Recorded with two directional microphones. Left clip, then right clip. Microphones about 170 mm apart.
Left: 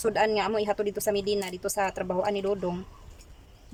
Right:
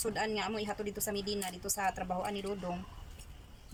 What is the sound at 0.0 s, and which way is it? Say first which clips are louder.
Speech: left 10 dB; 55° left (ahead or behind).